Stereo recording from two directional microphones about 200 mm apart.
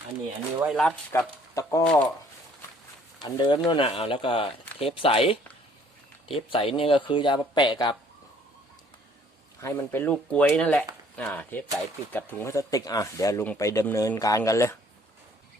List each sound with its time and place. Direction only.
0.6 s speech: centre (ahead or behind)
1.1 s speech: 15° left (ahead or behind)
1.8 s speech: 5° left (ahead or behind)
3.2 s speech: 20° left (ahead or behind)
9.6 s speech: 10° left (ahead or behind)